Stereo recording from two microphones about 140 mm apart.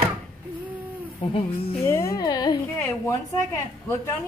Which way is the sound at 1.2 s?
40° left (ahead or behind).